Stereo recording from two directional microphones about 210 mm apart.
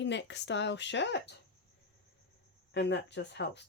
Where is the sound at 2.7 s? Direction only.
55° left (ahead or behind).